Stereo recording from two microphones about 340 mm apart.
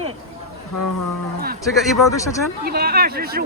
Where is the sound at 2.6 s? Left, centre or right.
Right.